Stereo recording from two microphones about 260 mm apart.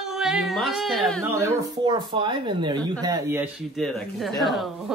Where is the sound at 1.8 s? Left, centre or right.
Centre.